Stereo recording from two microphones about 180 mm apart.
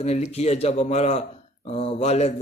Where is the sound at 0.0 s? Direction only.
35° left (ahead or behind).